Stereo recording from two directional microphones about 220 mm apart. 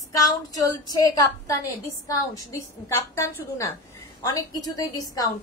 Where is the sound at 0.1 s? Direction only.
15° left (ahead or behind).